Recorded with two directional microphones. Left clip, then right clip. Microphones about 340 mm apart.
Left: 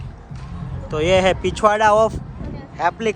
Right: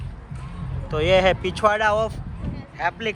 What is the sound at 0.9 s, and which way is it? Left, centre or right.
Speech, centre.